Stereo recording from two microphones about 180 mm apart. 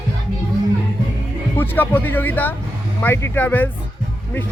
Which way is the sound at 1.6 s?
10° left (ahead or behind).